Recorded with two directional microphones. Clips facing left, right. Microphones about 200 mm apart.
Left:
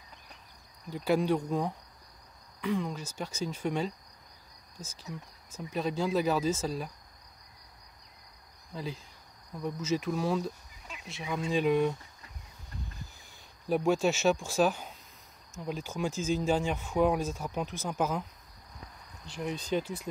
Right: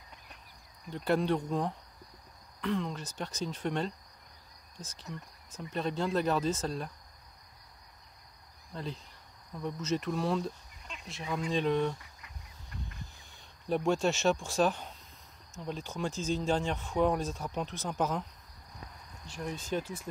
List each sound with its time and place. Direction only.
0.8 s speech: 5° left (ahead or behind)
8.7 s speech: 5° left (ahead or behind)
13.7 s speech: 5° left (ahead or behind)
19.5 s speech: 35° left (ahead or behind)